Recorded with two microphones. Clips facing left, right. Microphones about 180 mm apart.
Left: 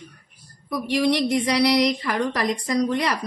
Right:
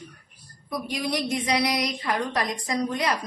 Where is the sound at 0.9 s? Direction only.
75° left (ahead or behind).